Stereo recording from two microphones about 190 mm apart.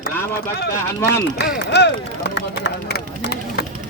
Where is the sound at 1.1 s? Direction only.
60° left (ahead or behind).